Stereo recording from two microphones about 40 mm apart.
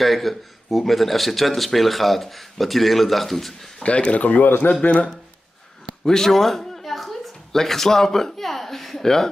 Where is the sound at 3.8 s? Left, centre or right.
Left.